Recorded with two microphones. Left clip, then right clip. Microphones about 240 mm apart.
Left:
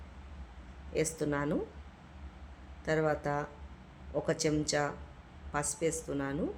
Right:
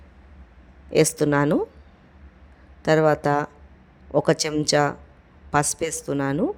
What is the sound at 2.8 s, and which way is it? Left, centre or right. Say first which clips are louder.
Speech: right 13 dB; right.